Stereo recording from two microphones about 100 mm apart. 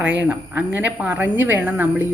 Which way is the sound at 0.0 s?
15° right (ahead or behind).